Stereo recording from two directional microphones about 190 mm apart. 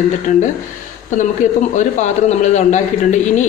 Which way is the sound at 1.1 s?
40° left (ahead or behind).